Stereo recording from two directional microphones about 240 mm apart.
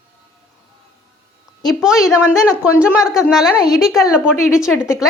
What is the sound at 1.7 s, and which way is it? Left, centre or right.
A woman's voice, centre.